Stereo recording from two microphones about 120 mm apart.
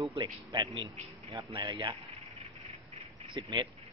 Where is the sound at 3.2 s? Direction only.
40° right (ahead or behind).